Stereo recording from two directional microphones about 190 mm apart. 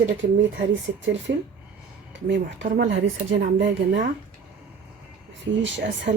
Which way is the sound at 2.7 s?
80° right.